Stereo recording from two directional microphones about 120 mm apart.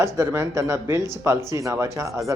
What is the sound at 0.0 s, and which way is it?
Speech, 20° right (ahead or behind).